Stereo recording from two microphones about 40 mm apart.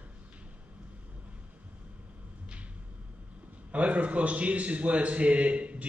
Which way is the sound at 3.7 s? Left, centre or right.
Right.